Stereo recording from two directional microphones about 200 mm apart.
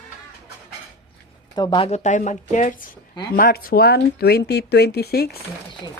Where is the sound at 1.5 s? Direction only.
20° left (ahead or behind); by 5.3 s 50° left (ahead or behind).